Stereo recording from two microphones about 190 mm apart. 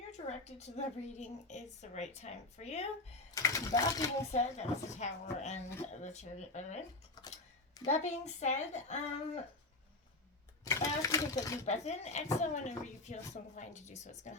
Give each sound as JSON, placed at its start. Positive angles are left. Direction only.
{"t": 0.1, "sound": "speech", "side_deg": 35}
{"t": 3.3, "sound": "speech", "side_deg": 15}
{"t": 4.3, "sound": "speech", "side_deg": 35}
{"t": 7.9, "sound": "speech", "side_deg": 35}
{"t": 10.6, "sound": "speech", "side_deg": 15}
{"t": 11.6, "sound": "speech", "side_deg": 35}